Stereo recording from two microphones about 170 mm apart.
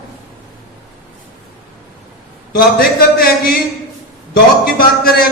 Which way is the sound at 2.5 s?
65° left (ahead or behind).